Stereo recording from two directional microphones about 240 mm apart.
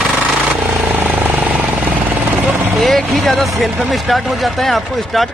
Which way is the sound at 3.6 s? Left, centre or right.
Centre.